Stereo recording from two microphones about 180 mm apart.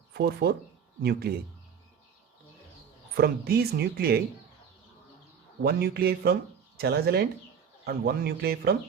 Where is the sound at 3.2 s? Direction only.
60° right (ahead or behind).